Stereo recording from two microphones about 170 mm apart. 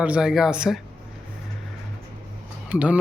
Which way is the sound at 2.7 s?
10° right (ahead or behind).